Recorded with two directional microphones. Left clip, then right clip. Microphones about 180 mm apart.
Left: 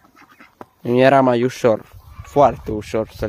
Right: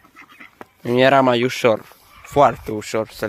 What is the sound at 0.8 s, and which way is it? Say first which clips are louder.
Speech: left 1 dB; 30° left (ahead or behind).